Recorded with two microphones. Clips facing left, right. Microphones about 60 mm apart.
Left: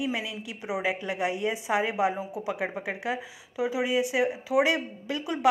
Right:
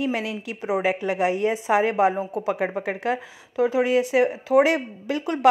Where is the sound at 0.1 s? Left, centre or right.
Right.